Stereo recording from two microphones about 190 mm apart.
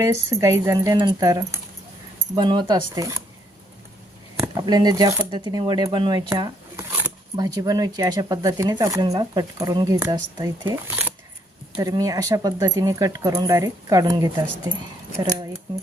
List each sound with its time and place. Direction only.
0.0 s speech: 15° right (ahead or behind)
4.4 s speech: 20° right (ahead or behind)